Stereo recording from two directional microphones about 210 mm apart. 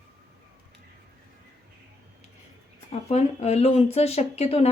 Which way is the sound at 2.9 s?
30° left (ahead or behind).